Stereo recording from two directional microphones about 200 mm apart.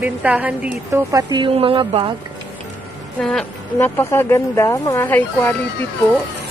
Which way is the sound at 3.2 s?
5° left (ahead or behind).